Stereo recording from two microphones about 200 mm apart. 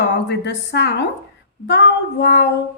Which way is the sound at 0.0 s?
60° left (ahead or behind).